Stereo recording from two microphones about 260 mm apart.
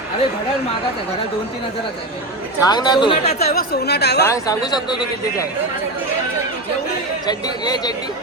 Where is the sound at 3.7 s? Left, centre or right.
Left.